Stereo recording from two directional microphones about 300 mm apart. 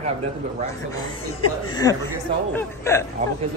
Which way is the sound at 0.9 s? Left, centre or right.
Centre.